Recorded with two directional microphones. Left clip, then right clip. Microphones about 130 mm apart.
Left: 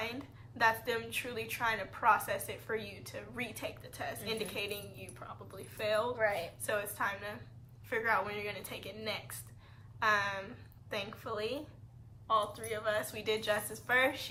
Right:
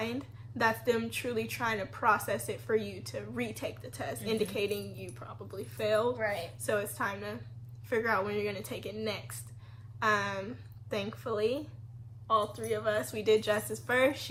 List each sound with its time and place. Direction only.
0.0 s a woman's voice: 5° right (ahead or behind)
6.1 s speech: 30° left (ahead or behind)
6.7 s a woman's voice: 5° right (ahead or behind)